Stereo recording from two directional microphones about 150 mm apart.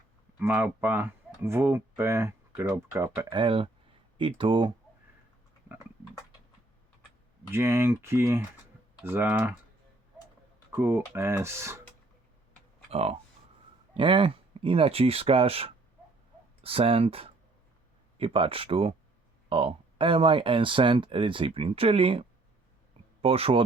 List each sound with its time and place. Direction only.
0.3 s speech: 10° right (ahead or behind)
3.2 s speech: 35° right (ahead or behind)
7.5 s speech: 15° right (ahead or behind)
10.7 s speech: 15° right (ahead or behind)
12.9 s speech: 45° right (ahead or behind)